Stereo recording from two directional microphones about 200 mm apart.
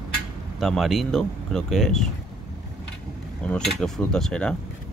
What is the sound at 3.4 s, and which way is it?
Speech, 5° left (ahead or behind).